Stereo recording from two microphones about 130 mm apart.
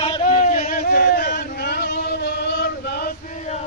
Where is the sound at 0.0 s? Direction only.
50° left (ahead or behind); by 1.5 s 90° left.